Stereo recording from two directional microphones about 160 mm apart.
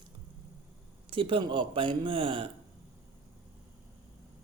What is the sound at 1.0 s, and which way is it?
Speech, 35° right (ahead or behind).